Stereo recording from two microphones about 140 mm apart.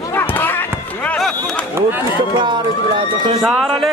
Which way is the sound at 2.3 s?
35° right (ahead or behind).